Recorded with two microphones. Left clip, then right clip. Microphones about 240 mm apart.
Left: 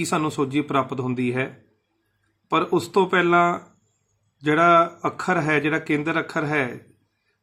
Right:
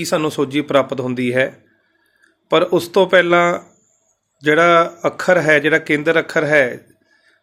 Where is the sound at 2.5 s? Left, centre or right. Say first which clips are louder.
Right 6 dB; centre.